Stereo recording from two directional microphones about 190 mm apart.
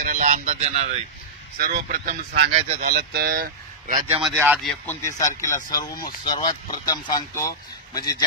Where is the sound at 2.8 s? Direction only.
55° right (ahead or behind).